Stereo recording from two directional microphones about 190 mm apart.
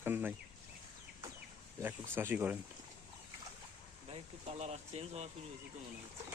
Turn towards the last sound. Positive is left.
turn(degrees=-35)  # may be behind; listen again after turning